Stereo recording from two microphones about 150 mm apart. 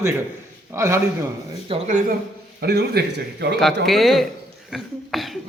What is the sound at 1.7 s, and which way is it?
Speech, 35° right (ahead or behind).